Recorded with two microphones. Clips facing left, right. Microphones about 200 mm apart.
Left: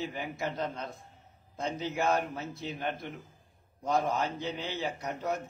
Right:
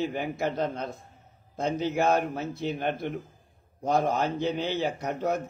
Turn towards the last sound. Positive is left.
turn(degrees=-50)  # may be behind; listen again after turning